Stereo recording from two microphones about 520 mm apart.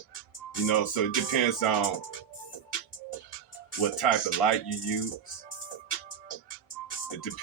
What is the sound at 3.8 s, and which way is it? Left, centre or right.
Speech, left.